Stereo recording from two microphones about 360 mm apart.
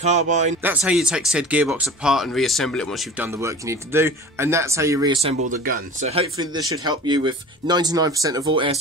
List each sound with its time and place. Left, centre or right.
0.0 s speech: centre
0.6 s speech: centre
5.5 s speech: right